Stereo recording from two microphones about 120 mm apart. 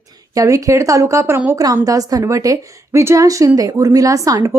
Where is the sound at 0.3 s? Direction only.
25° right (ahead or behind).